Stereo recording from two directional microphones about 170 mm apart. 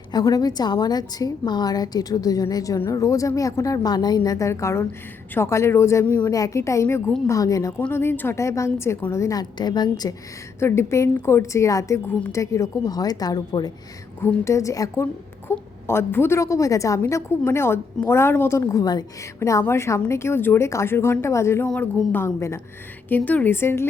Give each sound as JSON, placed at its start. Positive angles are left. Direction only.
{"t": 0.1, "sound": "a woman's voice", "side_deg": 25}